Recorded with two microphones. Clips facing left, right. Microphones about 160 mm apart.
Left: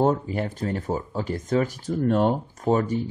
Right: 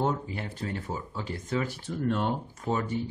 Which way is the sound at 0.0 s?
45° left (ahead or behind).